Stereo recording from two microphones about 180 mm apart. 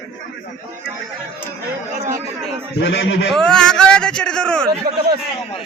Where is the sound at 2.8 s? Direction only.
90° left.